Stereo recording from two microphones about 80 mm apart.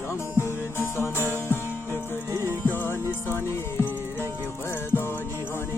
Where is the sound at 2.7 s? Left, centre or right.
Left.